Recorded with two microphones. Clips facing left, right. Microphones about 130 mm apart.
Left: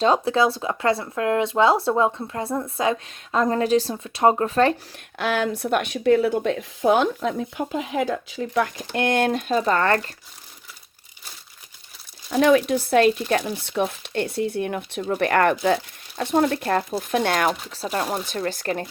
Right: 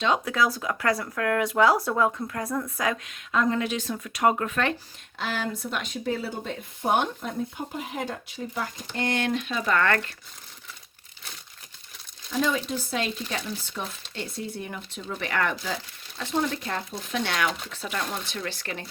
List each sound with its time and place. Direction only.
0.0 s speech: 30° left (ahead or behind)
5.1 s speech: 65° left (ahead or behind); by 10.1 s 35° left (ahead or behind)
12.3 s speech: 65° left (ahead or behind); by 17.5 s 50° left (ahead or behind)
17.7 s speech: 35° left (ahead or behind)